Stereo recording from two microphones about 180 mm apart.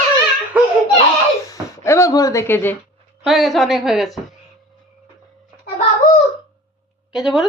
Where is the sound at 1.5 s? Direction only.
15° left (ahead or behind).